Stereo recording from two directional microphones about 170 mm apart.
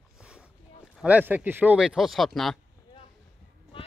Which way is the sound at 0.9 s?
10° right (ahead or behind).